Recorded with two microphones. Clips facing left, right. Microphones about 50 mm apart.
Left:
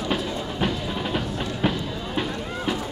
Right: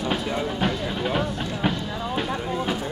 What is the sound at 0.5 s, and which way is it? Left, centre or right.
Music, centre.